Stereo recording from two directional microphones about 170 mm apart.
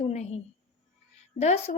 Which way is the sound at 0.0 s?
40° left (ahead or behind).